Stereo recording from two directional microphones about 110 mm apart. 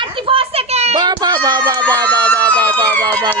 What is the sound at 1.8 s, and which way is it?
Speech, 10° left (ahead or behind).